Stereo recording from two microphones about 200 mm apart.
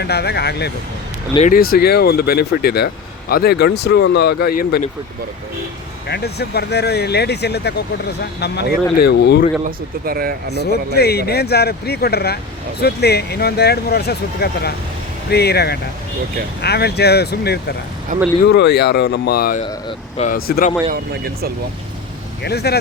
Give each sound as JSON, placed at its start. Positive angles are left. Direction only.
{"t": 0.0, "sound": "speech", "side_deg": 55}
{"t": 1.4, "sound": "speech", "side_deg": 45}
{"t": 6.1, "sound": "speech", "side_deg": 55}
{"t": 9.6, "sound": "speech", "side_deg": -50}
{"t": 10.6, "sound": "speech", "side_deg": 55}
{"t": 18.1, "sound": "speech", "side_deg": -40}
{"t": 18.4, "sound": "speech", "side_deg": 60}
{"t": 20.9, "sound": "speech", "side_deg": -50}
{"t": 22.4, "sound": "speech", "side_deg": 55}